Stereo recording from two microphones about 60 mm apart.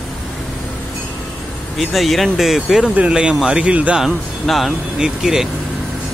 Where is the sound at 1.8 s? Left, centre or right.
Centre.